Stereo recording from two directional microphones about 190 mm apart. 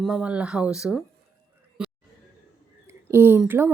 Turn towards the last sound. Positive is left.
turn(degrees=-10)  # may be behind; listen again after turning